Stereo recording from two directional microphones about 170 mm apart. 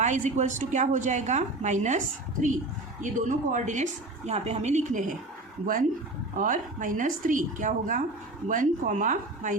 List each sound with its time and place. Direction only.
0.0 s a woman's voice: 45° right (ahead or behind)
3.0 s a woman's voice: 50° right (ahead or behind)
6.3 s a woman's voice: 50° right (ahead or behind)